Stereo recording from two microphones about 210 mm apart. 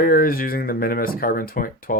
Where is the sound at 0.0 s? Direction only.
45° left (ahead or behind).